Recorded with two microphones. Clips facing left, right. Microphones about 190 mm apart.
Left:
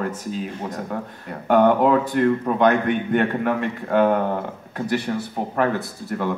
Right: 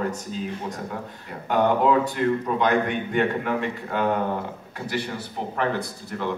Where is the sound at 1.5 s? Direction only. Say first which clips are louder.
Left 4 dB; 55° left (ahead or behind).